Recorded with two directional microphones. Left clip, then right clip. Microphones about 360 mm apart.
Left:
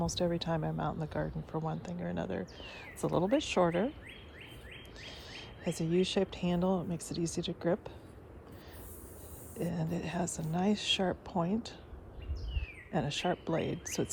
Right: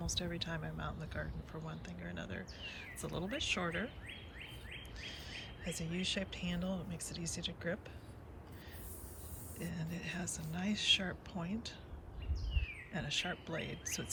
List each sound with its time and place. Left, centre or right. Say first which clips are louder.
0.0 s speech: left 8 dB; centre
5.0 s speech: left 1 dB; centre
9.6 s speech: left 9 dB; centre
12.9 s speech: left 6 dB; centre